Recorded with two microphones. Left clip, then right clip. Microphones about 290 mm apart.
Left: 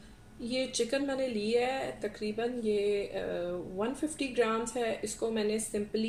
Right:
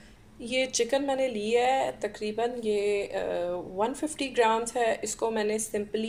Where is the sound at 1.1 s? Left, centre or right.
Centre.